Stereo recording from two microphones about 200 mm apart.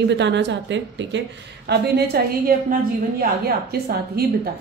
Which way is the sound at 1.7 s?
50° right (ahead or behind).